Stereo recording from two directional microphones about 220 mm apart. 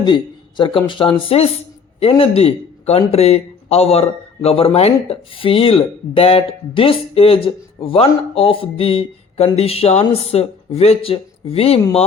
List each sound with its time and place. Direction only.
0.0 s speech: 20° left (ahead or behind)